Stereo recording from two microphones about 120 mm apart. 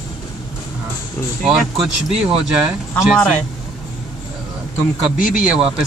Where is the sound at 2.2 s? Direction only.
10° right (ahead or behind).